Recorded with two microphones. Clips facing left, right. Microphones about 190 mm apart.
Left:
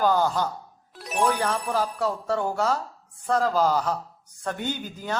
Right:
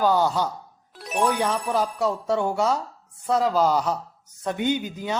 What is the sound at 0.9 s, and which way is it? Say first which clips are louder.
Music: right 1 dB; centre (ahead or behind).